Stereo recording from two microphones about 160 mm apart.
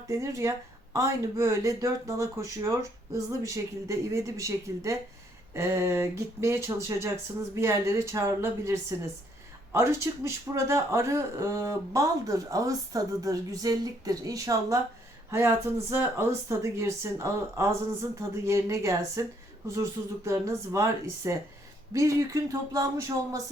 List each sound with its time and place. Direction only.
0.1 s speech: 20° right (ahead or behind)